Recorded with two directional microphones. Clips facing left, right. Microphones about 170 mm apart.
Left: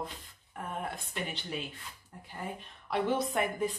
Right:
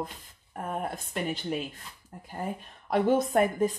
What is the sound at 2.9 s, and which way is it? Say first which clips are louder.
Speech: right 6 dB; 45° right (ahead or behind).